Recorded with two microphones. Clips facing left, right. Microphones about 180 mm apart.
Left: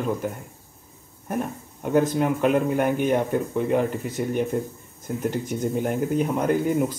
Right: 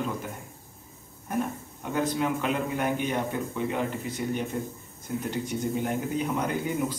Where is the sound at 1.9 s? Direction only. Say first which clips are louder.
Left 6 dB; 45° left (ahead or behind).